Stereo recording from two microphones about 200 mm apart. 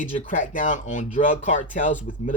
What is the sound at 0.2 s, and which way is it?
Speech, 40° left (ahead or behind).